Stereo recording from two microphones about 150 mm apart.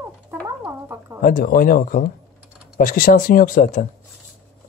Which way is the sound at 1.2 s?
70° left (ahead or behind).